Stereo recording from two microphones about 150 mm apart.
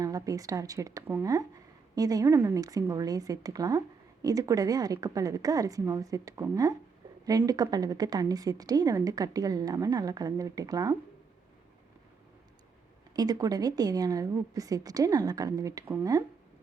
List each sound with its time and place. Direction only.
0.0 s a woman's voice: 25° right (ahead or behind)
13.1 s a woman's voice: 25° right (ahead or behind)